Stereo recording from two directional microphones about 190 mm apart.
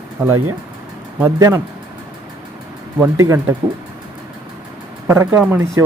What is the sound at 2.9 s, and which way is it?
Speech, 15° right (ahead or behind).